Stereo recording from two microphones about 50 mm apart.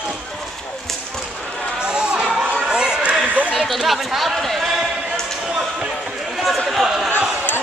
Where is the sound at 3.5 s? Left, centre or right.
Centre.